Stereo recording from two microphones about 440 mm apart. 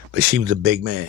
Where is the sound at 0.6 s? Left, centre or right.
Right.